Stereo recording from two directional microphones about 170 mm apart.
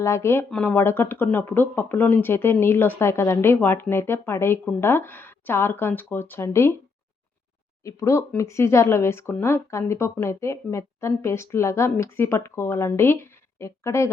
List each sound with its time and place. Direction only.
0.0 s speech: 15° left (ahead or behind)
7.9 s speech: 20° left (ahead or behind)